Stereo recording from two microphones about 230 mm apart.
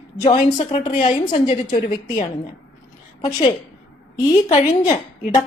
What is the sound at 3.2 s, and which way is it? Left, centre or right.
Speech, centre.